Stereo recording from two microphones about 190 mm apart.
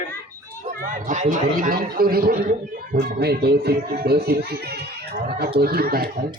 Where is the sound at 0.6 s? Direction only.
40° right (ahead or behind).